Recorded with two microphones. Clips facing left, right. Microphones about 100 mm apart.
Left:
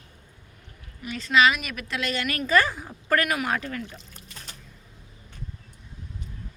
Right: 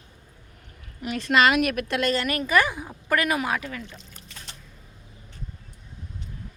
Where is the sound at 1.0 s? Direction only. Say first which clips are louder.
Right 1 dB; 55° right (ahead or behind).